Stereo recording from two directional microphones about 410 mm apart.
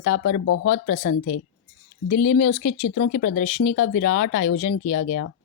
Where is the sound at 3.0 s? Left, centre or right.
Centre.